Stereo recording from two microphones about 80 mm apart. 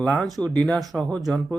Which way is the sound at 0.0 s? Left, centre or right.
Centre.